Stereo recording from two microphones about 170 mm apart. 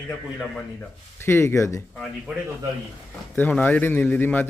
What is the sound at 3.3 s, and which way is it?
Speech, 10° left (ahead or behind).